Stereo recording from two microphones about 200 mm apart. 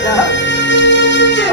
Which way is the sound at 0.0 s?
65° left (ahead or behind).